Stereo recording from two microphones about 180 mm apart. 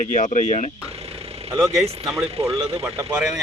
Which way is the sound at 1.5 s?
20° right (ahead or behind).